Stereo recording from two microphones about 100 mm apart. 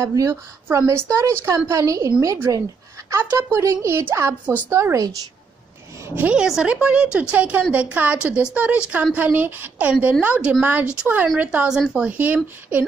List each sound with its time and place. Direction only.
0.0 s a woman's voice: 35° right (ahead or behind)
6.2 s a woman's voice: 5° right (ahead or behind)